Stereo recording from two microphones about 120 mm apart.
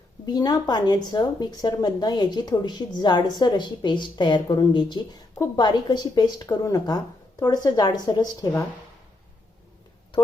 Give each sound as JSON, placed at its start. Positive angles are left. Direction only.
{"t": 0.3, "sound": "speech", "side_deg": 30}